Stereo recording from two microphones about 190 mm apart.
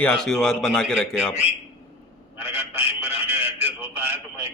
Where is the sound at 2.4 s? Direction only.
10° right (ahead or behind).